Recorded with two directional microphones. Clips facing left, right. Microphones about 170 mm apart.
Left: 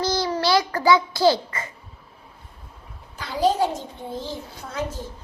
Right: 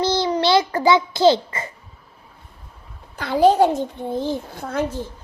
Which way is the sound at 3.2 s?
60° right (ahead or behind).